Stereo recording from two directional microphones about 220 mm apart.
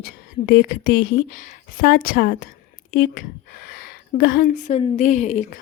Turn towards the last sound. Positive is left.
turn(degrees=30)  # may be behind; listen again after turning